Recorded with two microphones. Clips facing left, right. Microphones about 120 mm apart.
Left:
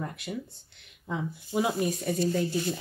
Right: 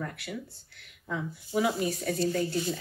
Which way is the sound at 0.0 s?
20° left (ahead or behind).